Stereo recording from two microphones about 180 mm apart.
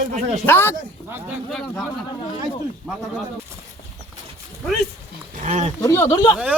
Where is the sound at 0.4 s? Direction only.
15° left (ahead or behind).